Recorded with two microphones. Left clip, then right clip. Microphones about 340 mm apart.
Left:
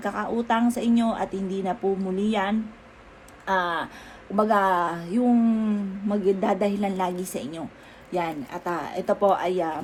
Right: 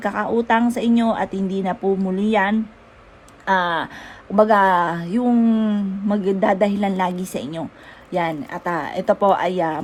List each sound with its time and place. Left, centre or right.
0.0 s speech: right
1.8 s a woman's voice: right
2.2 s speech: right